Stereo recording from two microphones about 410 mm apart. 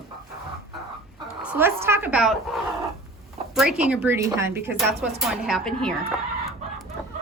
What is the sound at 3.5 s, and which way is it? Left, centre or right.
A woman's voice, centre.